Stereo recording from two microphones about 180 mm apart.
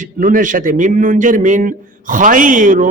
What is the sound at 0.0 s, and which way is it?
A man's voice, 45° right (ahead or behind).